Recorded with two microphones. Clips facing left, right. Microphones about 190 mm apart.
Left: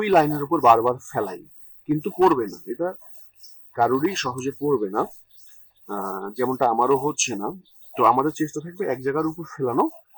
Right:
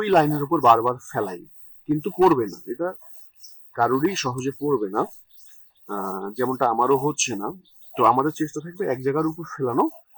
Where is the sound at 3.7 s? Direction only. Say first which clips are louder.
Left 1 dB; 10° left (ahead or behind).